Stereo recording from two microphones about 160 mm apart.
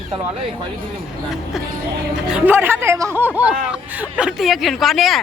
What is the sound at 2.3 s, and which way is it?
Speech, 10° right (ahead or behind).